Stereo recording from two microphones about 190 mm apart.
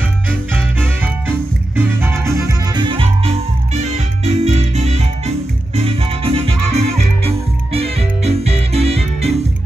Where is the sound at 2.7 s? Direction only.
25° right (ahead or behind).